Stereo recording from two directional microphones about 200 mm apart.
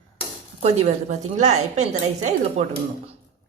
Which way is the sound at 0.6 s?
35° right (ahead or behind).